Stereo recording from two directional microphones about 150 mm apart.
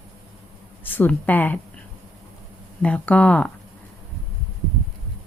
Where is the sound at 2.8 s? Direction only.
10° left (ahead or behind).